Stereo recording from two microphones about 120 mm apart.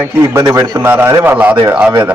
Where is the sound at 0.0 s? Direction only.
25° right (ahead or behind).